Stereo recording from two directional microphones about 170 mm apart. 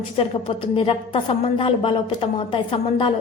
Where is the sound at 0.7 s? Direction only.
30° left (ahead or behind).